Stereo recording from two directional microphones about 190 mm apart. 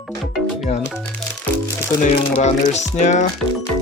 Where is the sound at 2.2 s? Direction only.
30° left (ahead or behind).